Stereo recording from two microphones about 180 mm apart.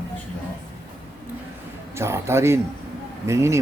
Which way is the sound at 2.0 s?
15° right (ahead or behind).